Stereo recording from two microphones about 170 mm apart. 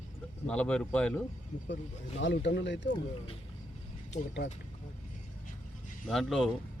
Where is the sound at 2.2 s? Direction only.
90° left.